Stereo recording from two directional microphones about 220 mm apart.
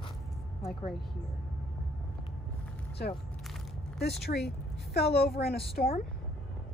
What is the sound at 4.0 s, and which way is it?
A woman's voice, 50° left (ahead or behind).